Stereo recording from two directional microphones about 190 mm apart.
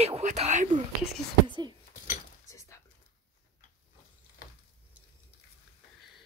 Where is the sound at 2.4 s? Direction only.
15° left (ahead or behind).